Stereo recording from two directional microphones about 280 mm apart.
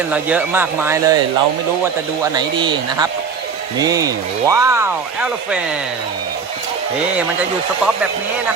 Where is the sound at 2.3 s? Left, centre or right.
Centre.